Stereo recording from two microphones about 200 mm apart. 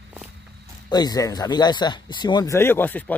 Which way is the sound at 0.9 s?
20° left (ahead or behind).